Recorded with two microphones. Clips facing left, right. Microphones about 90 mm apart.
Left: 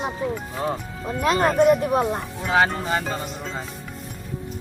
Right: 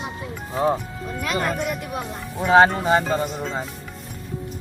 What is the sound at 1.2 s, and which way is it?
Speech, 35° left (ahead or behind).